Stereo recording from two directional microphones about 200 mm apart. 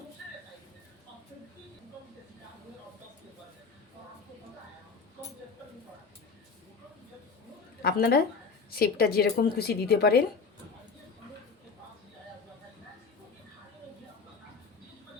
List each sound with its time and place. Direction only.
7.8 s a woman's voice: 50° left (ahead or behind)